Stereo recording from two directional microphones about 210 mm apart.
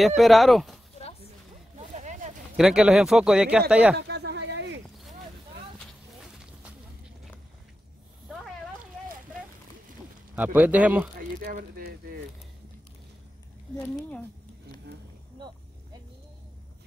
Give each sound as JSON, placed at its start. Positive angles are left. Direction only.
{"t": 0.0, "sound": "speech", "side_deg": 0}
{"t": 1.8, "sound": "a sound", "side_deg": -35}
{"t": 2.5, "sound": "speech", "side_deg": -5}
{"t": 3.9, "sound": "a sound", "side_deg": -50}
{"t": 10.3, "sound": "a man's voice", "side_deg": -10}
{"t": 11.1, "sound": "speech", "side_deg": -45}
{"t": 13.7, "sound": "speech", "side_deg": 5}